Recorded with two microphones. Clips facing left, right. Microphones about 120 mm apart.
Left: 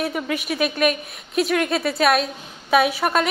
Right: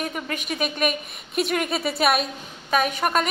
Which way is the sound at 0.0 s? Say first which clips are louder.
Left 5 dB; 5° left (ahead or behind).